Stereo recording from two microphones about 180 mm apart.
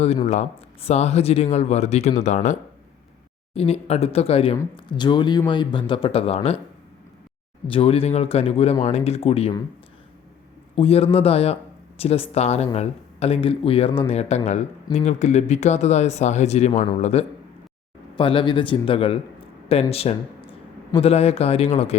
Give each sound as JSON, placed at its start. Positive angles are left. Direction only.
{"t": 0.3, "sound": "speech", "side_deg": 35}
{"t": 7.7, "sound": "speech", "side_deg": 30}
{"t": 10.8, "sound": "a man's voice", "side_deg": 35}